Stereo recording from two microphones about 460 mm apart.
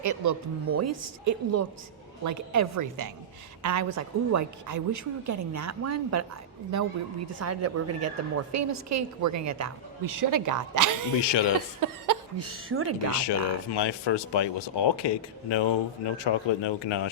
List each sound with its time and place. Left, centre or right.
0.0 s a woman's voice: right
7.3 s a woman's voice: right
11.3 s speech: left
11.8 s a sound: right
12.5 s a woman's voice: right
13.1 s speech: left